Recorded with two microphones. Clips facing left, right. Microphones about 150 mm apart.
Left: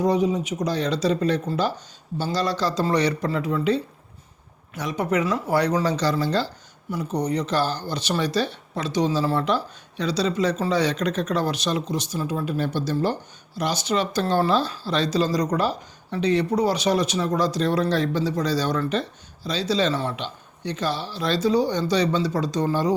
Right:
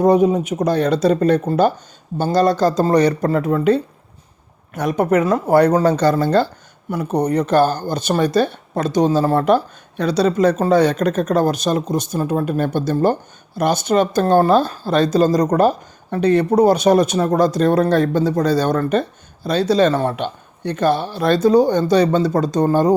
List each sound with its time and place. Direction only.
0.0 s speech: 55° right (ahead or behind)